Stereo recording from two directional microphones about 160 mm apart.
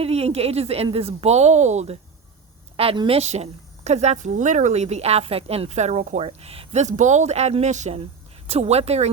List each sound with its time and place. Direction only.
0.0 s a woman's voice: 40° right (ahead or behind)
2.7 s a woman's voice: 35° right (ahead or behind)